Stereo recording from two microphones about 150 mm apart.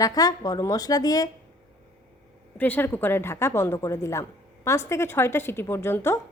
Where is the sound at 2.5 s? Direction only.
10° left (ahead or behind).